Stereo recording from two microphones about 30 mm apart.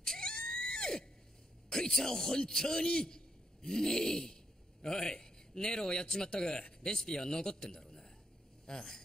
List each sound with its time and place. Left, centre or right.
0.0 s screaming: left
2.0 s a man's voice: centre